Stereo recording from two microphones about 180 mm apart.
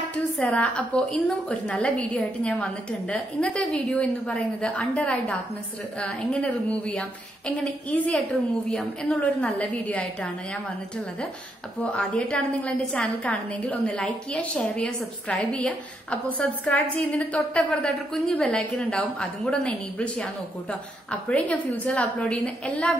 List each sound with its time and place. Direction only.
0.1 s a woman's voice: 5° left (ahead or behind)
11.8 s a woman's voice: 5° left (ahead or behind)